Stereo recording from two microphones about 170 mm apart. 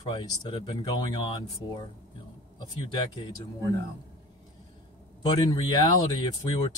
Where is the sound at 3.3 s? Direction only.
20° left (ahead or behind).